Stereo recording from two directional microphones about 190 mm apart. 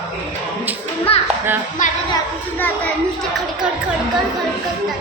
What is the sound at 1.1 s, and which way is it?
Music, 30° left (ahead or behind).